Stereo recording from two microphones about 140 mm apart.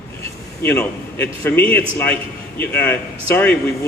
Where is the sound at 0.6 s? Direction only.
15° left (ahead or behind).